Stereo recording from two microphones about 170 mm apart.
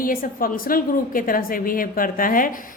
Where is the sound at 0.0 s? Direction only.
55° left (ahead or behind).